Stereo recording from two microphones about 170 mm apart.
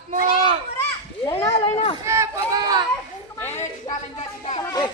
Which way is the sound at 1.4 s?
35° left (ahead or behind).